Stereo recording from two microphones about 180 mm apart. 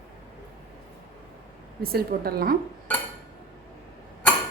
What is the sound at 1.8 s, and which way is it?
Dishes, 55° right (ahead or behind).